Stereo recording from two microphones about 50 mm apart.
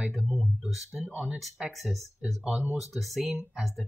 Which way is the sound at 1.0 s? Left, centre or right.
Right.